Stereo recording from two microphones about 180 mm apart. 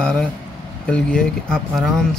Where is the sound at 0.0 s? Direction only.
5° left (ahead or behind).